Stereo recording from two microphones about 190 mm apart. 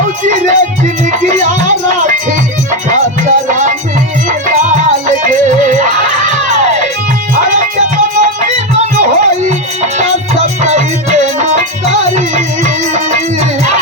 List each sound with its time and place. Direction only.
0.3 s music: 40° right (ahead or behind)
2.9 s music: 40° right (ahead or behind)